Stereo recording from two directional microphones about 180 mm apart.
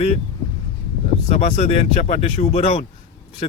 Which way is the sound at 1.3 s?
35° left (ahead or behind).